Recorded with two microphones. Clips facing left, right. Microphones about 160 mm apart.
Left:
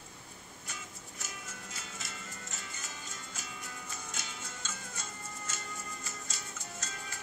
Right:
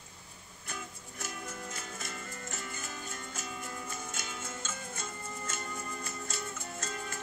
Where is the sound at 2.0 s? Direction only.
55° right (ahead or behind).